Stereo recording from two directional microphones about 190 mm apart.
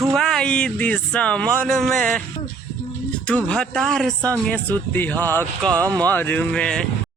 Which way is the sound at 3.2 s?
5° left (ahead or behind).